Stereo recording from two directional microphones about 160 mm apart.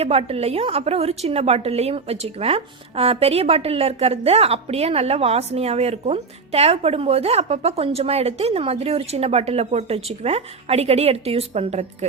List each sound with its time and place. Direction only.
0.0 s a woman's voice: 40° right (ahead or behind)